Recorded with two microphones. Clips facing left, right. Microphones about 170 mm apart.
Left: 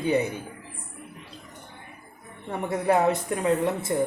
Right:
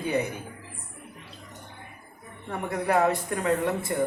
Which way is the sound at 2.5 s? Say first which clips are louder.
Left 3 dB; 20° left (ahead or behind).